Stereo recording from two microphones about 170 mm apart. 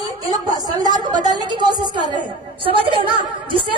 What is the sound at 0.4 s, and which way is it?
A woman's voice, 25° right (ahead or behind).